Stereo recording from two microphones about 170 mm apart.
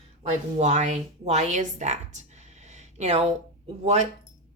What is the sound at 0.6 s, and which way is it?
A woman's voice, 40° right (ahead or behind).